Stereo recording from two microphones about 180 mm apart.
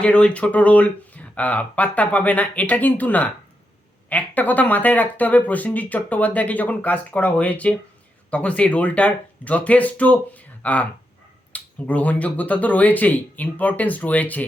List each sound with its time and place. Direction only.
0.0 s speech: 5° left (ahead or behind)